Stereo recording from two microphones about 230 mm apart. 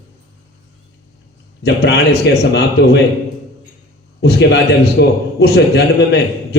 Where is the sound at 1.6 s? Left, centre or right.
Left.